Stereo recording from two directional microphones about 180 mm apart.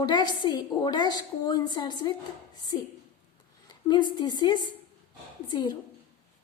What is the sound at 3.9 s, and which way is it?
A woman's voice, 25° left (ahead or behind).